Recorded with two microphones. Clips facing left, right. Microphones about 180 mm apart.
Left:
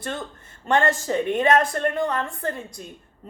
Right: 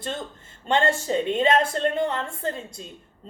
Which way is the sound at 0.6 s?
25° right (ahead or behind).